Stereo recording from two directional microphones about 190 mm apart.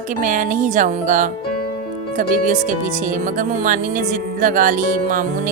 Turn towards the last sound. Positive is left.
turn(degrees=-45)  # may be behind; listen again after turning